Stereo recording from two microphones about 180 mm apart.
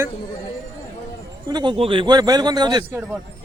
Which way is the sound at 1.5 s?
25° right (ahead or behind).